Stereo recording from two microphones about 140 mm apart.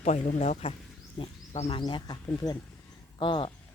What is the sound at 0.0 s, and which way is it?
A man's voice, 55° left (ahead or behind).